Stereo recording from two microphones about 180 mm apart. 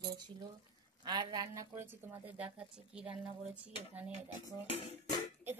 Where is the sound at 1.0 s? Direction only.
25° right (ahead or behind); by 4.1 s 5° right (ahead or behind).